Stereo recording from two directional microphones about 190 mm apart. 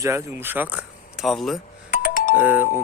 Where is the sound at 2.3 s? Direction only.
10° right (ahead or behind).